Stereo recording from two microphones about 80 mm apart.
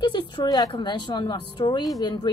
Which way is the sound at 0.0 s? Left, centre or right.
Left.